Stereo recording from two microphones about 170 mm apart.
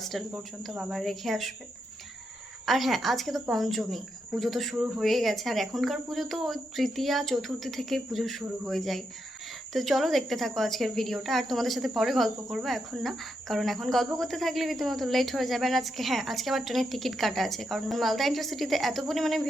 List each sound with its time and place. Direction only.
0.0 s speech: centre (ahead or behind)
2.6 s speech: centre (ahead or behind)